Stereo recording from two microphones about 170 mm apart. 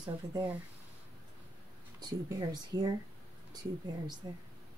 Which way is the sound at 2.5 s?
25° right (ahead or behind).